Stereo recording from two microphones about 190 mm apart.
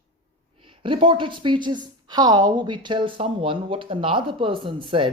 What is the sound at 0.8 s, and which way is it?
Speech, 25° right (ahead or behind).